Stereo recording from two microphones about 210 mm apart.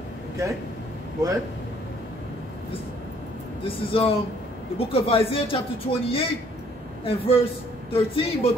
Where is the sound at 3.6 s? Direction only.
25° left (ahead or behind).